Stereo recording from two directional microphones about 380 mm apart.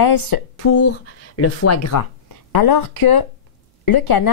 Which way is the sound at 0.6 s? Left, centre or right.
Left.